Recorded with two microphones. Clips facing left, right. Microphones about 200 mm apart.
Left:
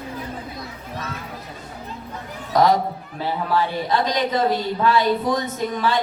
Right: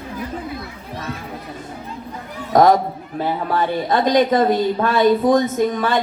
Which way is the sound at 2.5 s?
50° right (ahead or behind).